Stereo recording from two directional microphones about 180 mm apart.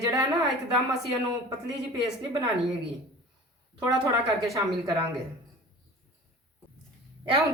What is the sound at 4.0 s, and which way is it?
Speech, 15° right (ahead or behind).